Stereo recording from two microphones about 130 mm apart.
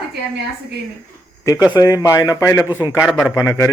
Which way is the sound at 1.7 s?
30° left (ahead or behind).